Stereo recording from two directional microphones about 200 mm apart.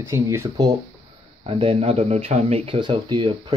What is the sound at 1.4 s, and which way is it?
Speech, 25° right (ahead or behind).